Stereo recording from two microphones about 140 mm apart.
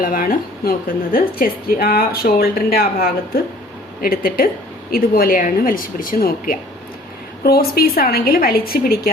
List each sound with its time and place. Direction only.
0.0 s a woman's voice: 85° left